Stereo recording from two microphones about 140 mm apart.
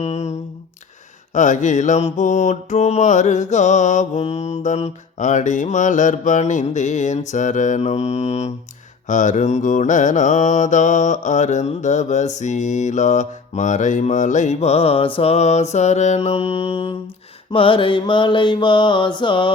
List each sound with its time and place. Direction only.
0.0 s a sound: 50° left (ahead or behind)
1.3 s mantra: 65° left (ahead or behind)
9.0 s mantra: 65° left (ahead or behind); by 19.5 s 35° left (ahead or behind)